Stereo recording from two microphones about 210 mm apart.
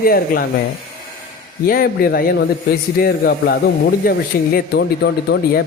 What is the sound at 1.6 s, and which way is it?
Speech, 45° left (ahead or behind).